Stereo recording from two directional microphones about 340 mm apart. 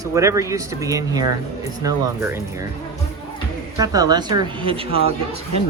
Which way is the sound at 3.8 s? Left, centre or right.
Centre.